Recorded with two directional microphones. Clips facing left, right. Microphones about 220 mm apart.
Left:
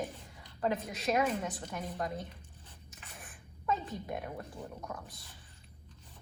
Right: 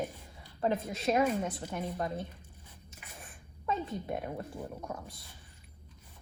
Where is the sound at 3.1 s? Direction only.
25° right (ahead or behind).